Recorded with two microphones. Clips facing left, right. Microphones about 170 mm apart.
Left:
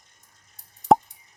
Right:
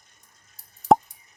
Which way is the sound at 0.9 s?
Centre (ahead or behind).